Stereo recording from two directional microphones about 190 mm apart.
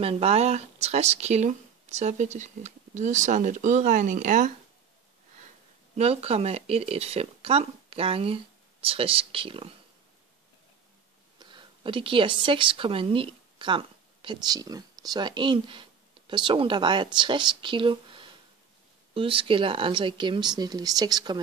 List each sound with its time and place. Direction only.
0.0 s speech: 35° right (ahead or behind)
5.9 s speech: 35° right (ahead or behind)
11.3 s speech: 25° right (ahead or behind)